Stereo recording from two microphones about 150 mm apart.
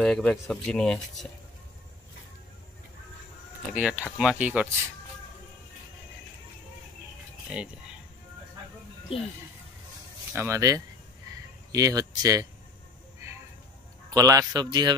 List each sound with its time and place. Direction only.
0.0 s speech: 5° left (ahead or behind)
3.7 s speech: 10° right (ahead or behind)
7.5 s speech: 5° right (ahead or behind)
9.1 s speech: 40° left (ahead or behind)
10.3 s speech: 20° right (ahead or behind)
14.1 s speech: 25° right (ahead or behind)